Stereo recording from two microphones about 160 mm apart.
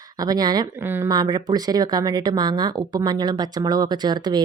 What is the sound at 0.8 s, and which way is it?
Speech, 15° right (ahead or behind).